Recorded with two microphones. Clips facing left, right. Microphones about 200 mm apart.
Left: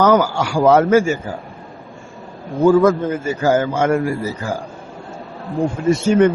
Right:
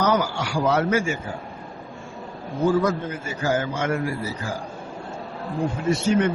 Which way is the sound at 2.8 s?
45° left (ahead or behind).